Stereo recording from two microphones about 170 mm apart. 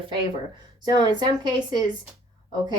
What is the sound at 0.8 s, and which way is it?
Speech, 25° right (ahead or behind).